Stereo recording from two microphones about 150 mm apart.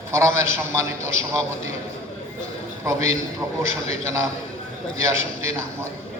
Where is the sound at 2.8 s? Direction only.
20° right (ahead or behind).